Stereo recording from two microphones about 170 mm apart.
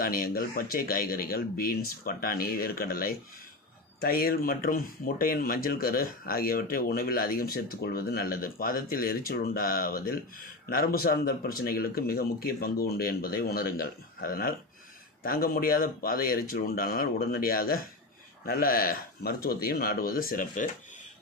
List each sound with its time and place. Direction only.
0.0 s speech: 55° left (ahead or behind)